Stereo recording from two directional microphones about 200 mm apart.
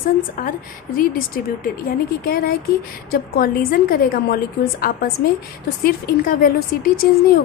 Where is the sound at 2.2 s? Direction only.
50° left (ahead or behind).